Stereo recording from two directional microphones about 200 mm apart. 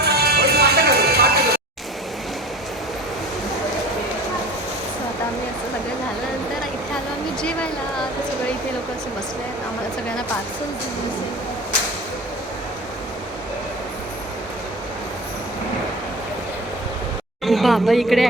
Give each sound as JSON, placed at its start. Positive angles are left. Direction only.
{"t": 0.0, "sound": "music", "side_deg": -50}
{"t": 7.4, "sound": "a sound", "side_deg": 5}
{"t": 17.4, "sound": "speech", "side_deg": 0}